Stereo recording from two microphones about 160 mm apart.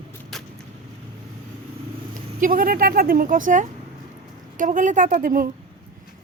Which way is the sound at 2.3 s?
60° right (ahead or behind).